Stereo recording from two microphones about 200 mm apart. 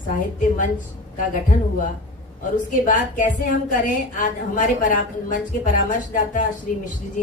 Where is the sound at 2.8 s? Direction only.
40° left (ahead or behind).